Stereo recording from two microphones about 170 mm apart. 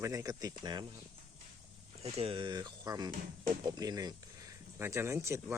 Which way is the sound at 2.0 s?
35° right (ahead or behind).